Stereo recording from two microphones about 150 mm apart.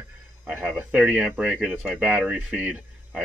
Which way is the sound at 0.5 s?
10° right (ahead or behind).